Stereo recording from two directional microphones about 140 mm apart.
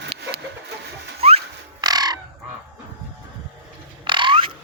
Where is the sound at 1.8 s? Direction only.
30° right (ahead or behind).